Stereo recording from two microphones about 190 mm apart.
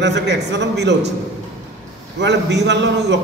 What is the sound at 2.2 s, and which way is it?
Speech, 65° right (ahead or behind).